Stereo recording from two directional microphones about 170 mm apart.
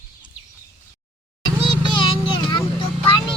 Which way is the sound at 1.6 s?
30° left (ahead or behind).